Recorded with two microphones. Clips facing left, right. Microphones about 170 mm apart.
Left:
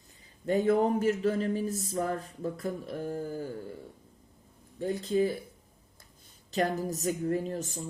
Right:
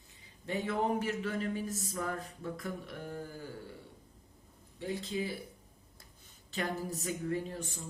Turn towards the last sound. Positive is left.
turn(degrees=40)  # may be behind; listen again after turning